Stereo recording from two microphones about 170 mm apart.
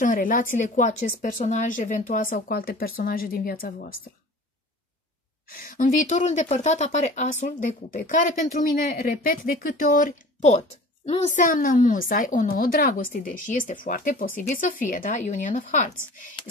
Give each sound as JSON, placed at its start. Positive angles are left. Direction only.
{"t": 0.0, "sound": "speech", "side_deg": 55}
{"t": 5.5, "sound": "speech", "side_deg": 55}